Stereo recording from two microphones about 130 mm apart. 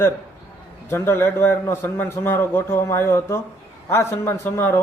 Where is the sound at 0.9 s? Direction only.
20° left (ahead or behind).